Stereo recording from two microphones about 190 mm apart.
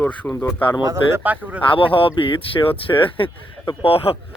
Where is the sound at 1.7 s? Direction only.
25° left (ahead or behind).